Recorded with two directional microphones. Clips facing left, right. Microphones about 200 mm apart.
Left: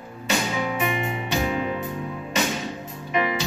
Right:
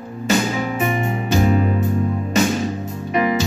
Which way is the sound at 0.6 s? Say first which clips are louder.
Right 4 dB; 40° right (ahead or behind).